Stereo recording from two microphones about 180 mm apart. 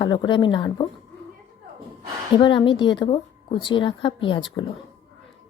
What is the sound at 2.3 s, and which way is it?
Speech, 25° left (ahead or behind).